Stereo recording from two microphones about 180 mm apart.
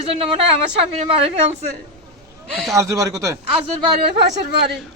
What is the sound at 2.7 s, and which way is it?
Speech, 15° right (ahead or behind).